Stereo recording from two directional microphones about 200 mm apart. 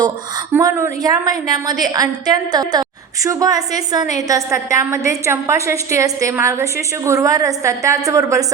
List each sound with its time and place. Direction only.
0.5 s a woman's voice: 15° right (ahead or behind)